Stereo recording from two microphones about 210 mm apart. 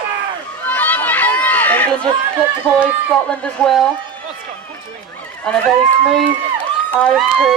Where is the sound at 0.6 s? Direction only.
10° left (ahead or behind).